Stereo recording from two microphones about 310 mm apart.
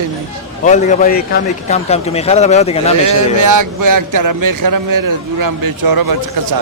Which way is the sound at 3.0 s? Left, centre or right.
Right.